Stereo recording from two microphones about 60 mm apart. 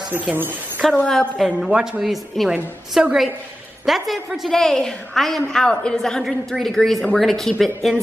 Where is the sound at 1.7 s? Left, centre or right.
Centre.